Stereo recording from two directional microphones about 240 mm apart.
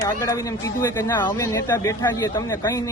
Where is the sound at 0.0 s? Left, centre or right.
Centre.